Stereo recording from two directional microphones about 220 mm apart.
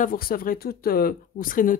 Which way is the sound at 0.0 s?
40° left (ahead or behind).